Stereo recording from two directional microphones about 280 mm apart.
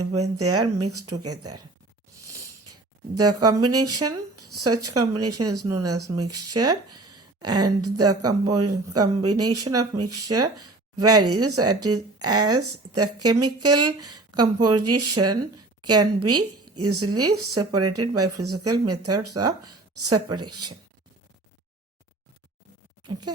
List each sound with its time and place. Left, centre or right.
0.0 s a woman's voice: right
3.2 s a woman's voice: right
14.3 s speech: centre
14.8 s a woman's voice: right